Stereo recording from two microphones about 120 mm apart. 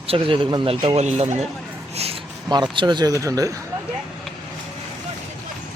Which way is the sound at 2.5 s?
35° right (ahead or behind).